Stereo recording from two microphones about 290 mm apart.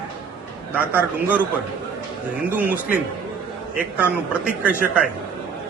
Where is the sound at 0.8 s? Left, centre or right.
Centre.